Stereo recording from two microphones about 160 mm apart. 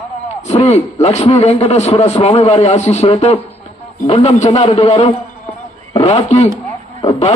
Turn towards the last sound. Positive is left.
turn(degrees=40)  # may be behind; listen again after turning